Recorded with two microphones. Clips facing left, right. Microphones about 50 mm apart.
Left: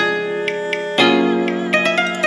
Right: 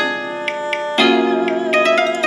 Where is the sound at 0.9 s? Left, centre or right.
Centre.